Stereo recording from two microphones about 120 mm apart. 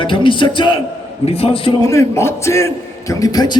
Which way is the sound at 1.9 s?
25° left (ahead or behind).